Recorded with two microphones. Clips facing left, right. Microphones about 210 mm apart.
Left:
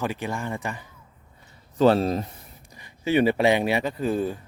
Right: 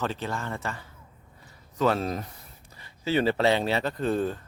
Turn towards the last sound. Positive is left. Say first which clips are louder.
# left 1 dB
turn(degrees=10)  # may be behind; listen again after turning